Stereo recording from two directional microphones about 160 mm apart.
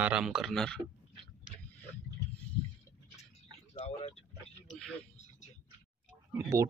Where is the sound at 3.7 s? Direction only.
40° left (ahead or behind).